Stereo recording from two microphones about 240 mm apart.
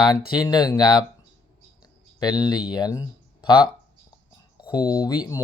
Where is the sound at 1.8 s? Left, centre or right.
Centre.